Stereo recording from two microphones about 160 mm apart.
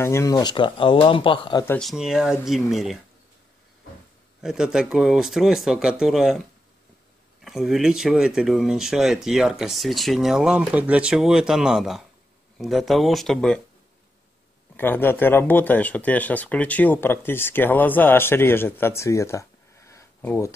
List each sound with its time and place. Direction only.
0.0 s speech: 20° left (ahead or behind)
1.8 s speech: centre (ahead or behind)
4.4 s speech: 5° right (ahead or behind)
7.4 s speech: centre (ahead or behind)
14.8 s speech: 10° left (ahead or behind)